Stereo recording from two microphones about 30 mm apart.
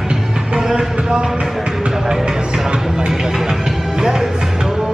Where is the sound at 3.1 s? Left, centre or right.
Centre.